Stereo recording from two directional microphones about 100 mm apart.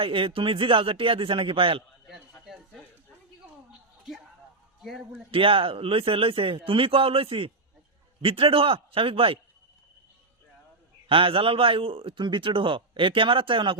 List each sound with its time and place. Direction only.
0.0 s a man's voice: 65° right (ahead or behind)
4.8 s a man's voice: centre (ahead or behind)
5.3 s a man's voice: 65° right (ahead or behind)
11.1 s a man's voice: 65° right (ahead or behind)